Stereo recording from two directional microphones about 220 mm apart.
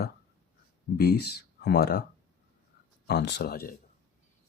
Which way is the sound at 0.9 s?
45° left (ahead or behind).